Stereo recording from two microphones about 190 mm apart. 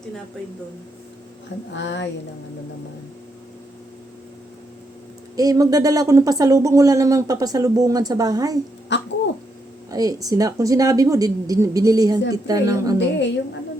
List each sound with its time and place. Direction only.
1.7 s a woman's voice: 70° left (ahead or behind)
5.4 s speech: 20° right (ahead or behind)
8.9 s a woman's voice: 70° left (ahead or behind)
9.9 s speech: 20° right (ahead or behind)
13.0 s a woman's voice: 70° left (ahead or behind)